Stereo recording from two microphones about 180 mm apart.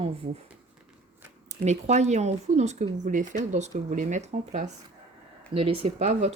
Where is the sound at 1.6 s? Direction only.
40° right (ahead or behind).